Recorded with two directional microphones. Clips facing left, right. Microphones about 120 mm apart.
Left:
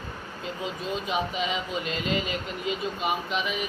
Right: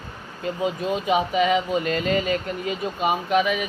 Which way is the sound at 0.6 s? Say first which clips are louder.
Right 7 dB; 60° right (ahead or behind).